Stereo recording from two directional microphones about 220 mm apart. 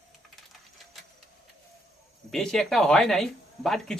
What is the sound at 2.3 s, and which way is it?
Speech, centre (ahead or behind).